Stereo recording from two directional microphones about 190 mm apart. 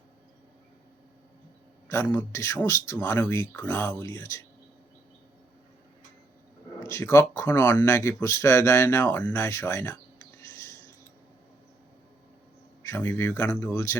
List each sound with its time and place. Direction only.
1.9 s speech: 15° left (ahead or behind)
6.8 s speech: 15° left (ahead or behind)
12.8 s speech: 10° left (ahead or behind)